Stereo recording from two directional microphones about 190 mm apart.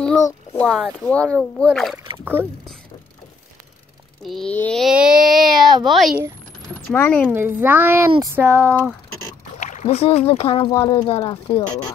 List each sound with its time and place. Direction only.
0.2 s speech: 5° left (ahead or behind)
4.2 s speech: centre (ahead or behind)
7.3 s a child's voice: 10° right (ahead or behind)
9.6 s speech: 40° left (ahead or behind)